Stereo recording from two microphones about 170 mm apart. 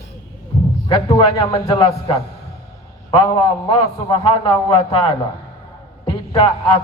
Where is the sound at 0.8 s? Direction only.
30° left (ahead or behind).